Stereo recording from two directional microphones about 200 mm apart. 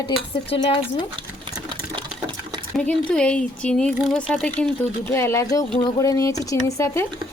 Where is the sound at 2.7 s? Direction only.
5° left (ahead or behind).